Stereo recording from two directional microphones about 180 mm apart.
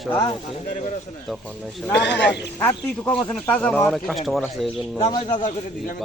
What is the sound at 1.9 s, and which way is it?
Speech, 75° left (ahead or behind).